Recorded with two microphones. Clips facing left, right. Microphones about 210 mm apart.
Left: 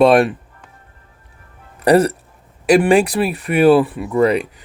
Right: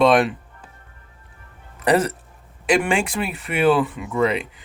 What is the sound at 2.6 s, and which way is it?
Speech, 40° left (ahead or behind).